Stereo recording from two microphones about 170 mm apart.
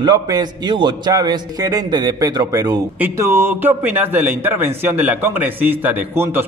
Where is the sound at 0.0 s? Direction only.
25° right (ahead or behind).